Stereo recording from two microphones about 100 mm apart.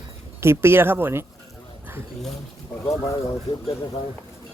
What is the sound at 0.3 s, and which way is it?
Speech, 25° right (ahead or behind).